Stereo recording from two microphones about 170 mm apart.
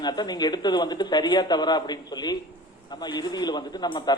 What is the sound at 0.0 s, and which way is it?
A man's voice, 25° left (ahead or behind).